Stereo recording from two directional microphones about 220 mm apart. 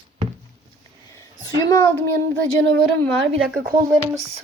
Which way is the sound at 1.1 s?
15° left (ahead or behind).